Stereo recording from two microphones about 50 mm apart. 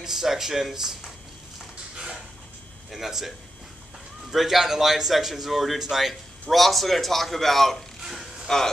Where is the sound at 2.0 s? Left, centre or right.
Centre.